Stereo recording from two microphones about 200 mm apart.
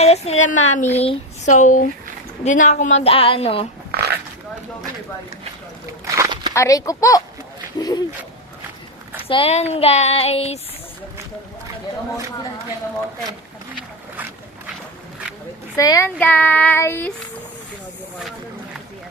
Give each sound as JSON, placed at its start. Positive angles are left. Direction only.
{"t": 0.0, "sound": "speech", "side_deg": 35}
{"t": 3.9, "sound": "dog", "side_deg": -55}
{"t": 6.1, "sound": "walk", "side_deg": -15}
{"t": 6.5, "sound": "child singing", "side_deg": 15}
{"t": 7.8, "sound": "speech", "side_deg": 20}
{"t": 9.2, "sound": "speech", "side_deg": 30}
{"t": 15.7, "sound": "child singing", "side_deg": 15}